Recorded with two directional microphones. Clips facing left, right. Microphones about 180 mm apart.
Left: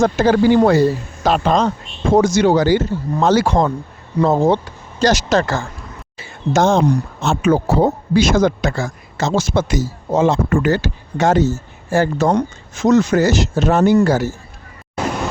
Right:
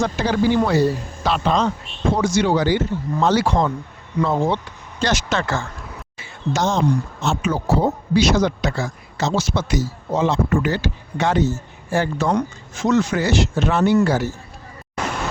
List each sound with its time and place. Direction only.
0.0 s a man's voice: 45° left (ahead or behind)
6.5 s a man's voice: 50° left (ahead or behind)